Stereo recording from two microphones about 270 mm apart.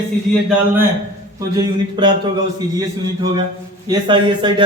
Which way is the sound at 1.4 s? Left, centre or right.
Centre.